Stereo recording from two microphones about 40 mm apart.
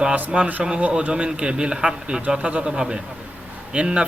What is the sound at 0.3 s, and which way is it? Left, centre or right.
A man's voice, right.